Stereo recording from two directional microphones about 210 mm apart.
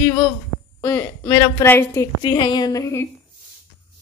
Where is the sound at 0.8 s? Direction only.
15° left (ahead or behind).